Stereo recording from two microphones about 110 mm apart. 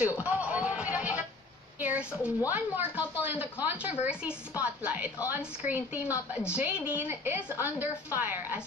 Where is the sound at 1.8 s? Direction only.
10° right (ahead or behind).